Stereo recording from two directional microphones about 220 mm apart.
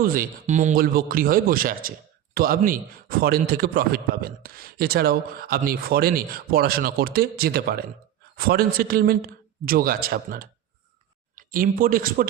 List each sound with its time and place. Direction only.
0.0 s a man's voice: 40° right (ahead or behind)